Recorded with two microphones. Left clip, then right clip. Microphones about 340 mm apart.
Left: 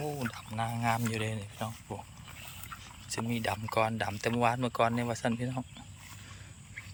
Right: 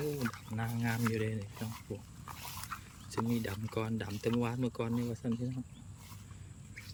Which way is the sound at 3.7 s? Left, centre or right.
Centre.